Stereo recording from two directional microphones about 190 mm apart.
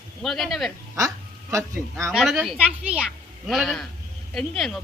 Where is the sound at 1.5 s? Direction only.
15° right (ahead or behind).